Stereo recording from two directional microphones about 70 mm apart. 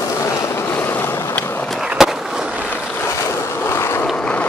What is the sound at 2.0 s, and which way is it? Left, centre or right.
Skateboard, centre.